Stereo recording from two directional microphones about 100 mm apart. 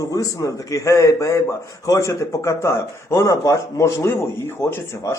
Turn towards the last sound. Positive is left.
turn(degrees=30)  # may be behind; listen again after turning